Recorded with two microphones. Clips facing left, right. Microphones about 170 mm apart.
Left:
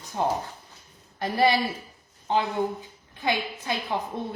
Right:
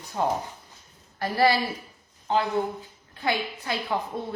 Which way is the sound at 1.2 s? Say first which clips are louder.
Even; 20° left (ahead or behind).